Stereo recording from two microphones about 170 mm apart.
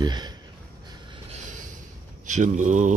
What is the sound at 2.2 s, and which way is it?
Speech, 45° right (ahead or behind).